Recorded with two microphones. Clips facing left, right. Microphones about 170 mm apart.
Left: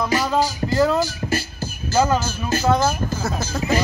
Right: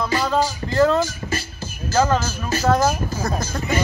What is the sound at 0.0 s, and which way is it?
Music, 10° left (ahead or behind).